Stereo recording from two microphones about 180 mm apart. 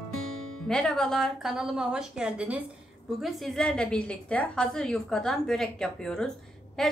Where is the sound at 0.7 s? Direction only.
5° left (ahead or behind).